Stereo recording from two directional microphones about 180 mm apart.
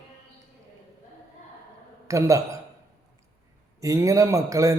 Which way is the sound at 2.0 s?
20° right (ahead or behind).